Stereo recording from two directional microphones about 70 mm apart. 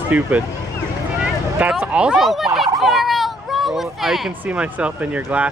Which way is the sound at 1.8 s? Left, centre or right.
Centre.